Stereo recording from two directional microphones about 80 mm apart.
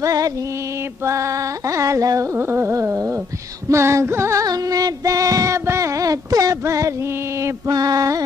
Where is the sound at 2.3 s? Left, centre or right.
Right.